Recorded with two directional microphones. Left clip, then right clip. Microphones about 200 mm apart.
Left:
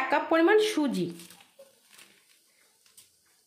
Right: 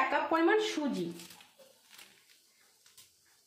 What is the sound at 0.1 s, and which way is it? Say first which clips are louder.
Speech: left 6 dB; 45° left (ahead or behind).